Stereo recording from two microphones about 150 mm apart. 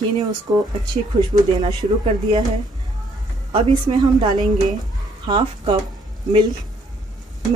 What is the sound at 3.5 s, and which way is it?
A woman's voice, 30° right (ahead or behind).